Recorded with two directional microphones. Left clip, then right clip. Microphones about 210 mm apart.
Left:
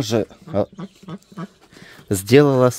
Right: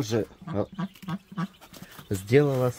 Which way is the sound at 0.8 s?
45° right (ahead or behind).